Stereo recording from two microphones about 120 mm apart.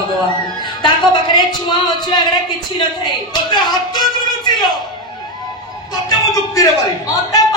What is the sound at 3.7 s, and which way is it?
Speech, 35° left (ahead or behind).